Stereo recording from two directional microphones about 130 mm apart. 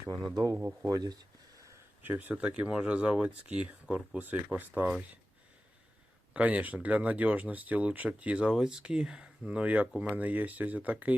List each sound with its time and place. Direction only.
0.5 s speech: 10° right (ahead or behind)
0.9 s a sound: 30° right (ahead or behind)
2.0 s speech: 15° right (ahead or behind)
6.3 s speech: 10° right (ahead or behind)